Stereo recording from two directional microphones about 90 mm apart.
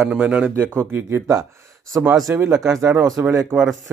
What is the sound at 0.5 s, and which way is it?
Speech, 25° right (ahead or behind).